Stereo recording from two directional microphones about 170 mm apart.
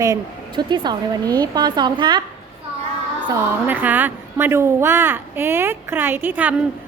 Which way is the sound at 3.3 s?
10° right (ahead or behind).